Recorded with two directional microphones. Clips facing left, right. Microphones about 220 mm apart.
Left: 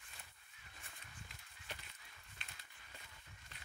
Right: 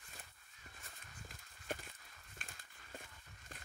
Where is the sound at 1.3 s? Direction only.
45° right (ahead or behind).